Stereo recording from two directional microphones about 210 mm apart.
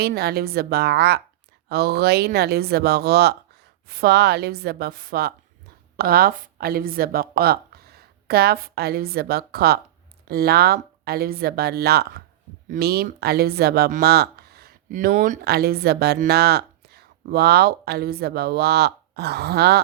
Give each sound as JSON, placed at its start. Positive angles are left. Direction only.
{"t": 0.0, "sound": "a woman's voice", "side_deg": -50}